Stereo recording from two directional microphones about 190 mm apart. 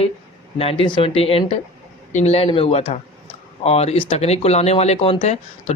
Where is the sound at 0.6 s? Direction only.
30° left (ahead or behind).